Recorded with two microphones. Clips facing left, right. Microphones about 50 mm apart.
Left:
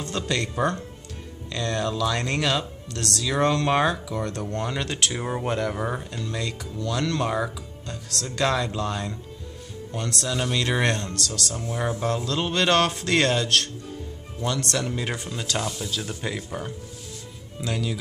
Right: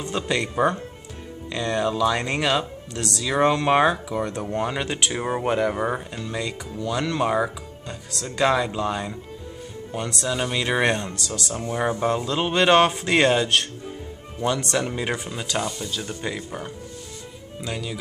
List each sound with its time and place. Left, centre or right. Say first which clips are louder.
0.0 s speech: right 2 dB; centre